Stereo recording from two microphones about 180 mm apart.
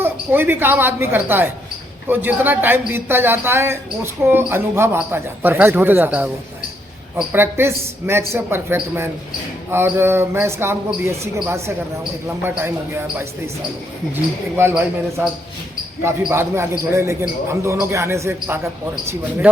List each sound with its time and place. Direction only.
0.0 s speech: 10° right (ahead or behind)
7.3 s speech: 15° right (ahead or behind)
14.5 s speech: 15° right (ahead or behind)
16.0 s speech: 15° right (ahead or behind)